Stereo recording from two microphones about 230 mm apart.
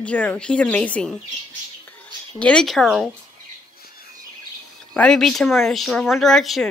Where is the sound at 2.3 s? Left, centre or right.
Centre.